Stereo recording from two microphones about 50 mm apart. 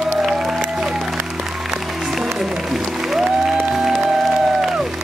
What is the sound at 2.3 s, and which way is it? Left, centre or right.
Music, centre.